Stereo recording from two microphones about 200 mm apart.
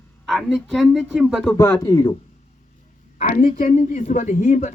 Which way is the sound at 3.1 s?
40° left (ahead or behind).